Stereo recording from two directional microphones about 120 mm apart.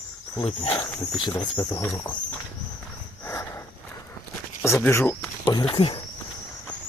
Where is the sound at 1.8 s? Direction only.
20° left (ahead or behind).